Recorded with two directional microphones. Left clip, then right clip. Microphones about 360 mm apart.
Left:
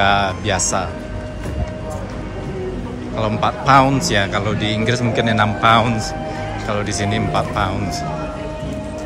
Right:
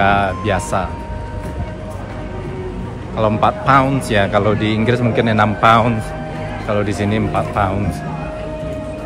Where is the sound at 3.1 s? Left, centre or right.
Centre.